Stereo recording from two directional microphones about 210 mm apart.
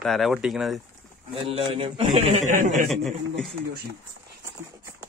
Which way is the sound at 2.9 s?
Centre (ahead or behind).